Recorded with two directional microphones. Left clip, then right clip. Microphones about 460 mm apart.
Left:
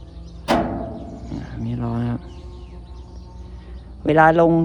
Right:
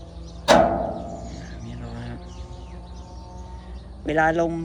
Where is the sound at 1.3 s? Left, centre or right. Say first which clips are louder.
Left 9 dB; centre.